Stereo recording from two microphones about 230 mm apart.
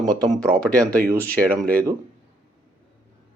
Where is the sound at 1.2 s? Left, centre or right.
Right.